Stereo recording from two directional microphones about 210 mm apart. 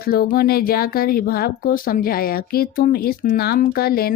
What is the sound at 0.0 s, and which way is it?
Speech, 45° left (ahead or behind).